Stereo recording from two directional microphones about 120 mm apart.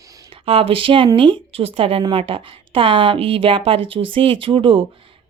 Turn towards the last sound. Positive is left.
turn(degrees=-50)  # may be behind; listen again after turning